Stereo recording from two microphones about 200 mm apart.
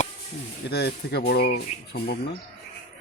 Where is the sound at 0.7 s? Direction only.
55° left (ahead or behind).